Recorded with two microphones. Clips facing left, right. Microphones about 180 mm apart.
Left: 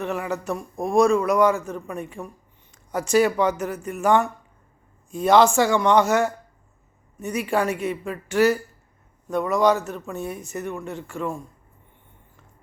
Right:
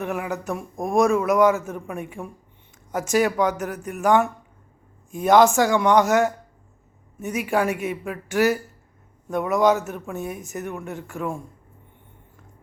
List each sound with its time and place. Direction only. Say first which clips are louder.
0.0 s a man's voice: even; 10° right (ahead or behind)
0.8 s a man's voice: left 1 dB; 20° right (ahead or behind)
1.0 s a woman's voice: right 2 dB; centre (ahead or behind)
2.9 s a woman's voice: left 2 dB; centre (ahead or behind)